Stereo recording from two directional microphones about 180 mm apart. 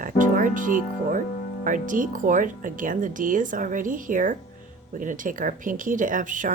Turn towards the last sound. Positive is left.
turn(degrees=-45)  # may be behind; listen again after turning